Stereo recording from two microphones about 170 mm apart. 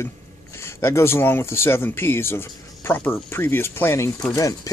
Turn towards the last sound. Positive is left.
turn(degrees=15)  # may be behind; listen again after turning